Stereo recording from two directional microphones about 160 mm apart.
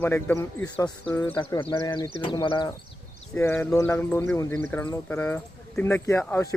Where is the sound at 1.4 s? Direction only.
30° left (ahead or behind).